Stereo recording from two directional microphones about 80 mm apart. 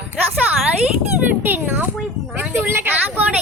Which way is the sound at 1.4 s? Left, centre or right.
Right.